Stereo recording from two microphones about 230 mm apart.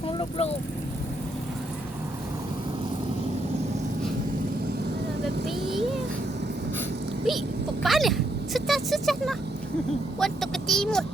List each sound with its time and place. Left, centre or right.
0.2 s speech: left
5.2 s vehicle: centre
7.3 s speech: centre